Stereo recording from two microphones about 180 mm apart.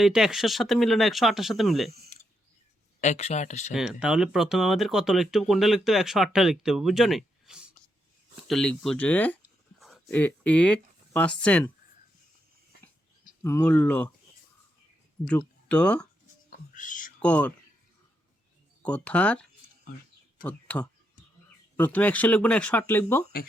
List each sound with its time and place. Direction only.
0.0 s speech: 5° right (ahead or behind)
3.0 s speech: 40° left (ahead or behind)
3.7 s speech: 5° right (ahead or behind)
13.4 s speech: 15° left (ahead or behind)
15.7 s speech: 5° left (ahead or behind)
16.5 s whispering: 45° left (ahead or behind)
17.2 s speech: 5° left (ahead or behind)
18.8 s speech: 5° left (ahead or behind)